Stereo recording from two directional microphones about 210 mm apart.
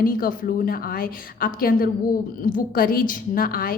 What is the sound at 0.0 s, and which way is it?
A woman's voice, 40° left (ahead or behind).